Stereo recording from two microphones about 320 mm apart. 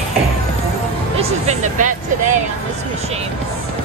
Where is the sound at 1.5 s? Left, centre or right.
Right.